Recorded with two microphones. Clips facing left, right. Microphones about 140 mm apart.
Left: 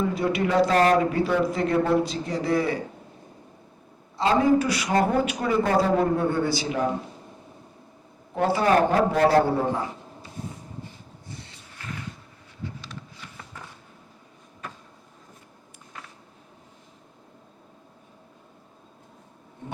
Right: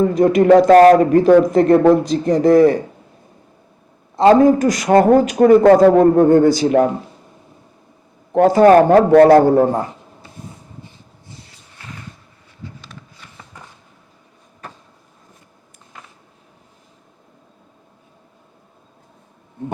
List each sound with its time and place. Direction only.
0.0 s a man's voice: 45° right (ahead or behind)
4.2 s a man's voice: 45° right (ahead or behind)
8.4 s a man's voice: 50° right (ahead or behind)